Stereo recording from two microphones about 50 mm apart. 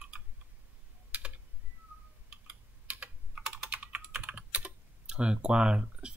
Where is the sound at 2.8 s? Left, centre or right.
Right.